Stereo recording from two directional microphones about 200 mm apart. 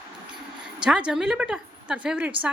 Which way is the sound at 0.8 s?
5° right (ahead or behind).